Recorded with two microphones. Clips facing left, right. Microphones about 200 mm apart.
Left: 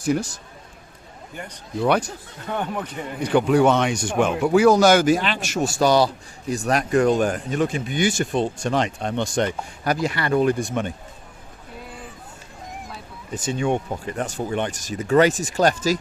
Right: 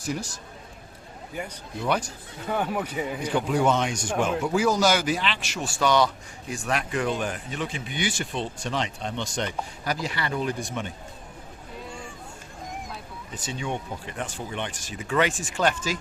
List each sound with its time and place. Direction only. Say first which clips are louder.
1.8 s speech: left 6 dB; 65° left (ahead or behind)
2.5 s speech: even; 5° right (ahead or behind)
3.2 s speech: left 7 dB; 65° left (ahead or behind)
13.3 s speech: left 9 dB; 50° left (ahead or behind)